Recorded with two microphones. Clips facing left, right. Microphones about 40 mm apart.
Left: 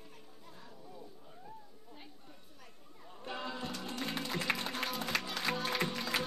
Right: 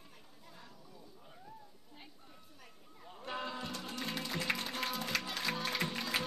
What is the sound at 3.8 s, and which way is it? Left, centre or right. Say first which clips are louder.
Music: left 3 dB; centre.